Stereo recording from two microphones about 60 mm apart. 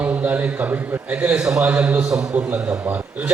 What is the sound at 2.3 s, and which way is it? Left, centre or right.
A man's voice, right.